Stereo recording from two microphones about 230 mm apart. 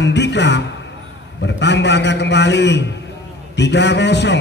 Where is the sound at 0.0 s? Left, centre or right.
Left.